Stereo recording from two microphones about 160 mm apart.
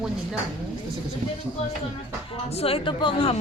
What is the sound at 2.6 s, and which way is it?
Speech, 35° left (ahead or behind).